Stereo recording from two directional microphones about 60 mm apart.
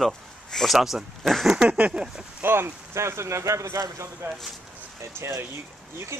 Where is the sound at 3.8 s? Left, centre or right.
Right.